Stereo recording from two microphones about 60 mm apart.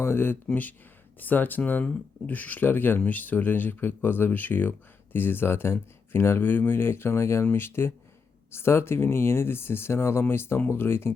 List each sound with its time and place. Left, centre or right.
0.0 s speech: left
1.2 s speech: left